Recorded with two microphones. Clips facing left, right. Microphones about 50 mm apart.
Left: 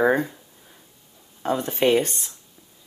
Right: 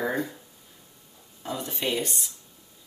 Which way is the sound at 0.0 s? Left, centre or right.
Left.